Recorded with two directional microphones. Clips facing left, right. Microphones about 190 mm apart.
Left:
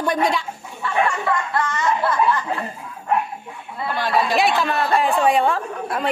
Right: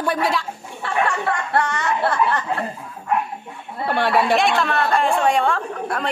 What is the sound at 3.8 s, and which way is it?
Speech, 65° right (ahead or behind).